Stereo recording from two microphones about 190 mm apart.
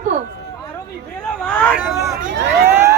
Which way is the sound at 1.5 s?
10° left (ahead or behind).